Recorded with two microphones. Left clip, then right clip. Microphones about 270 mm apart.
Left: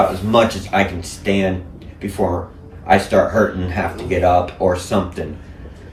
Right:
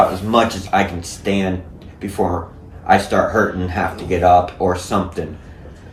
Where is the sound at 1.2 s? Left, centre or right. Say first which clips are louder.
Left 2 dB; centre.